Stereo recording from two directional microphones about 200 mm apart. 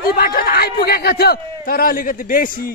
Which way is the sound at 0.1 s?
45° left (ahead or behind).